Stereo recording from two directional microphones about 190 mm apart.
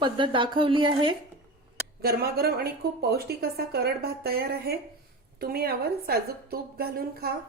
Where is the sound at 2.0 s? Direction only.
55° right (ahead or behind).